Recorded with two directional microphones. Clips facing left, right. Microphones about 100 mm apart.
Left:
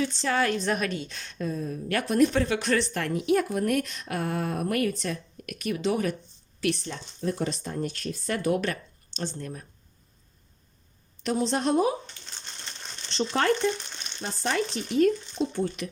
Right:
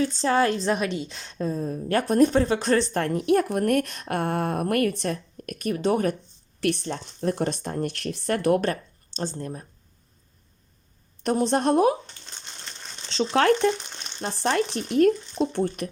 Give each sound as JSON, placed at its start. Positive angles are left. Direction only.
{"t": 0.0, "sound": "a woman's voice", "side_deg": -35}
{"t": 5.4, "sound": "speech", "side_deg": -40}
{"t": 8.6, "sound": "speech", "side_deg": -35}
{"t": 11.2, "sound": "speech", "side_deg": -50}
{"t": 13.3, "sound": "speech", "side_deg": -75}
{"t": 14.9, "sound": "speech", "side_deg": -55}